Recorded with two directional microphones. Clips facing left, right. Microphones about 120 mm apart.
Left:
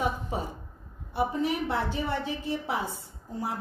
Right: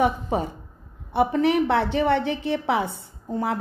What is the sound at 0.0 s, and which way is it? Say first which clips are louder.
A woman's voice: right 8 dB; 65° right (ahead or behind).